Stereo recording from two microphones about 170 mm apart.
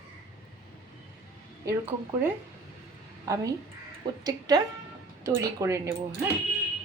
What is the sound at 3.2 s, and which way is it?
A woman's voice, 20° right (ahead or behind).